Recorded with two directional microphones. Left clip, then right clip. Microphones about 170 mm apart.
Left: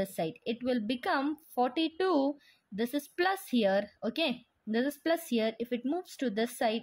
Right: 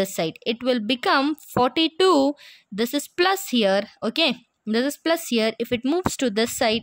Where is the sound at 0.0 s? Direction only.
30° right (ahead or behind).